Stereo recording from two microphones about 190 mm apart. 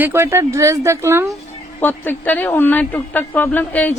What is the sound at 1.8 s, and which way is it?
Speech, 10° left (ahead or behind).